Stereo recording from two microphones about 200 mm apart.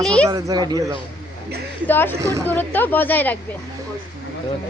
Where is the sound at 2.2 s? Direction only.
15° right (ahead or behind).